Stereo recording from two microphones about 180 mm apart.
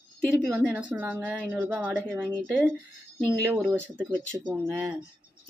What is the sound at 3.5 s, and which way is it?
Speech, 5° right (ahead or behind).